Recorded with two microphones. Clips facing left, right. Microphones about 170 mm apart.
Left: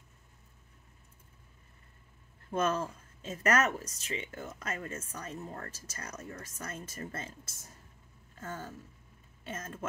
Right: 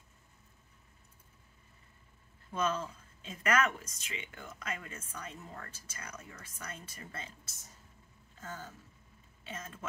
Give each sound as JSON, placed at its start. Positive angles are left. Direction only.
{"t": 2.5, "sound": "speech", "side_deg": 50}